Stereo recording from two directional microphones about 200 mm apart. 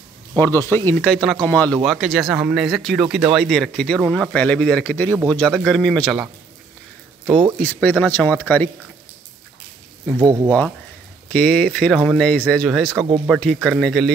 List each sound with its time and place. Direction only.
0.4 s speech: 10° left (ahead or behind)
7.2 s speech: 15° right (ahead or behind)
7.6 s speech: 5° left (ahead or behind)
10.1 s speech: 20° right (ahead or behind)
11.2 s speech: 5° left (ahead or behind)